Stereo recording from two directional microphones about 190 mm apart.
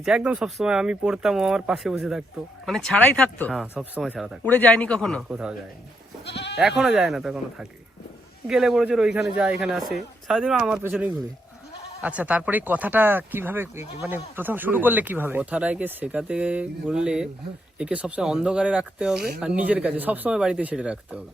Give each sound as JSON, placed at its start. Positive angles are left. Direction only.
{"t": 0.0, "sound": "speech", "side_deg": -5}
{"t": 6.2, "sound": "goat", "side_deg": 65}
{"t": 6.6, "sound": "speech", "side_deg": 0}